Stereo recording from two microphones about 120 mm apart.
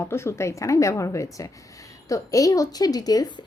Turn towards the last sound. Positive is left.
turn(degrees=30)  # may be behind; listen again after turning